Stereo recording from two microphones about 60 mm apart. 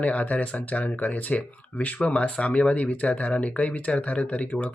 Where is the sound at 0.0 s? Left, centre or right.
Left.